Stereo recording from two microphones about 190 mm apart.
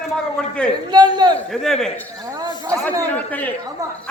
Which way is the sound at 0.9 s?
20° right (ahead or behind).